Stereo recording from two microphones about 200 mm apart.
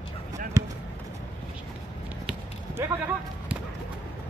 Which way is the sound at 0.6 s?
15° right (ahead or behind).